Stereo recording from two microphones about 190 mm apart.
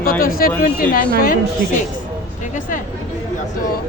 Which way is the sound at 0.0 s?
50° left (ahead or behind).